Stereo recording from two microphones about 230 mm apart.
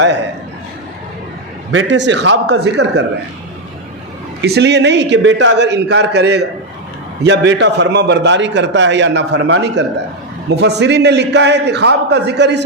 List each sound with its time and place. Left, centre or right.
1.7 s a man's voice: right
4.4 s a man's voice: right